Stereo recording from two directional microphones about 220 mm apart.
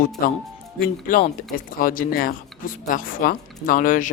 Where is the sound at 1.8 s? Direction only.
40° left (ahead or behind).